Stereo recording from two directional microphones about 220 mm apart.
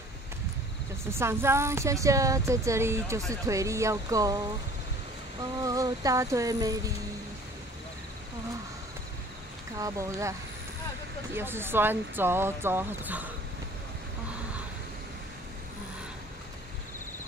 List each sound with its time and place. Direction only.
1.1 s speech: 10° right (ahead or behind)
5.6 s speech: 15° right (ahead or behind)
9.8 s speech: 15° right (ahead or behind)
11.3 s speech: 10° right (ahead or behind)